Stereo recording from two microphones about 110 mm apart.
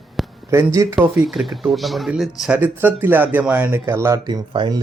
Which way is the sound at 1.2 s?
5° right (ahead or behind).